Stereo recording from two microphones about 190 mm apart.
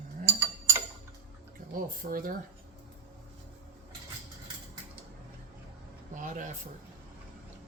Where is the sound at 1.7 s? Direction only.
45° right (ahead or behind).